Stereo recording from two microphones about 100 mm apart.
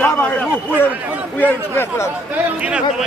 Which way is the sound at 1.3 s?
20° left (ahead or behind).